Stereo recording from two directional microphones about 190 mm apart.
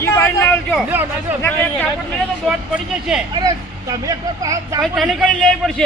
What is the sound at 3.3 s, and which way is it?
Speech, 20° right (ahead or behind).